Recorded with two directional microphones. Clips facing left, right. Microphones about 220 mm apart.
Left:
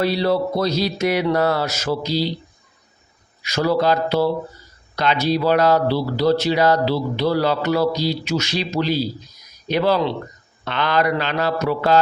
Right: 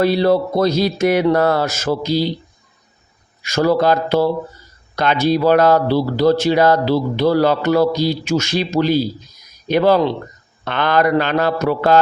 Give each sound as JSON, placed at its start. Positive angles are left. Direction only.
{"t": 0.0, "sound": "speech", "side_deg": -50}
{"t": 3.4, "sound": "speech", "side_deg": -50}